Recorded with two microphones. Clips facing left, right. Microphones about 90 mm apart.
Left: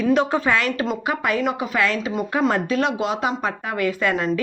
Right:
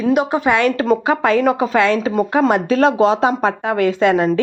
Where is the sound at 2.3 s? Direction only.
25° right (ahead or behind).